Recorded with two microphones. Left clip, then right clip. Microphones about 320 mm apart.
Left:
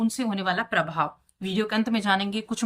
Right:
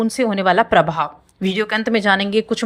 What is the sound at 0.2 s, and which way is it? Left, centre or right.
A woman's voice, centre.